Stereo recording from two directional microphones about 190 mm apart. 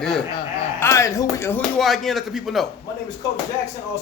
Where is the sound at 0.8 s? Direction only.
15° left (ahead or behind).